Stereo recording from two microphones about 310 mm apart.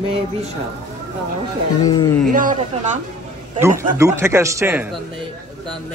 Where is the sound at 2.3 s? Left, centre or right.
Right.